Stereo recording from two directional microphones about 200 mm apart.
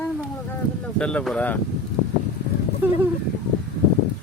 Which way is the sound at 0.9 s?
5° left (ahead or behind).